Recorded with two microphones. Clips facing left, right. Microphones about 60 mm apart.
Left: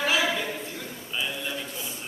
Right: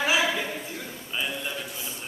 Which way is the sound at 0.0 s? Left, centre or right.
Centre.